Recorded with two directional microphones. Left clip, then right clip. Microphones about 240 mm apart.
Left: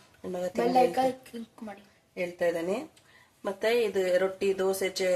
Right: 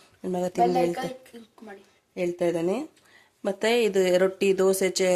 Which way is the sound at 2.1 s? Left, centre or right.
Right.